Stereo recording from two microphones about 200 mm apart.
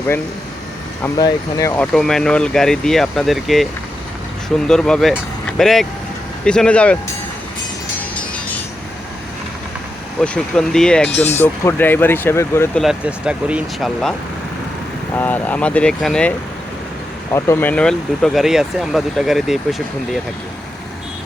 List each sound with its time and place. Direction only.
1.0 s speech: 15° left (ahead or behind)
1.8 s speech: 5° left (ahead or behind)
10.2 s speech: 5° left (ahead or behind)
12.8 s speech: 5° right (ahead or behind)
15.2 s speech: 10° left (ahead or behind)
17.3 s speech: 10° left (ahead or behind)